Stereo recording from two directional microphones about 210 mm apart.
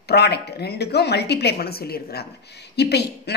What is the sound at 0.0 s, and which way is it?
A woman's voice, 50° left (ahead or behind).